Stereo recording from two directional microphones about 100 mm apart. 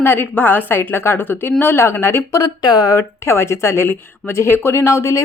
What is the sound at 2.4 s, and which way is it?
Speech, 40° left (ahead or behind).